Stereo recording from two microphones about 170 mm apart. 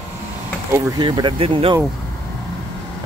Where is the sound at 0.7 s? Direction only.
20° right (ahead or behind).